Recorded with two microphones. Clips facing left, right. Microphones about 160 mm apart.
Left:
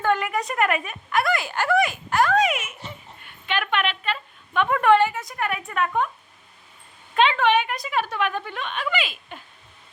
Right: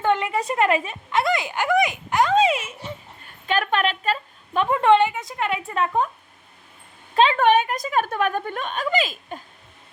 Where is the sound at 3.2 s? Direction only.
40° right (ahead or behind).